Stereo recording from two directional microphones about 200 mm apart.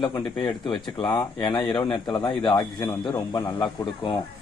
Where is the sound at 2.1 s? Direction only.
25° left (ahead or behind).